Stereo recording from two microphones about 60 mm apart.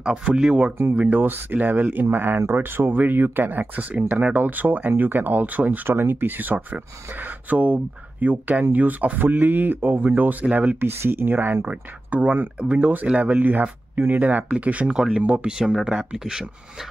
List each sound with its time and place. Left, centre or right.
0.0 s speech: centre
1.0 s speech: right
5.9 s speech: right
11.0 s speech: right
11.6 s speech: right